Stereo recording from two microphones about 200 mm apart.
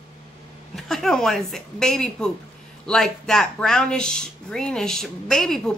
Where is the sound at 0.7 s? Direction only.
Centre (ahead or behind).